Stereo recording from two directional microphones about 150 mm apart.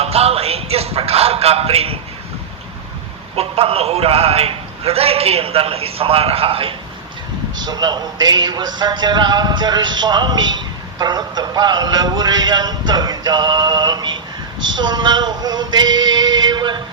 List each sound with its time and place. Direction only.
0.0 s speech: 40° right (ahead or behind)
3.3 s a man's voice: 40° right (ahead or behind)